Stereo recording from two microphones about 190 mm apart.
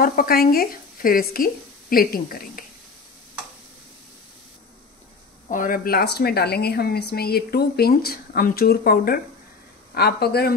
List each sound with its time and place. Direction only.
0.0 s speech: 50° left (ahead or behind)
5.5 s speech: 45° left (ahead or behind)